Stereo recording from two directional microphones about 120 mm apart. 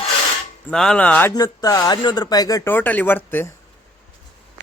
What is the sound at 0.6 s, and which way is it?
Speech, 5° left (ahead or behind).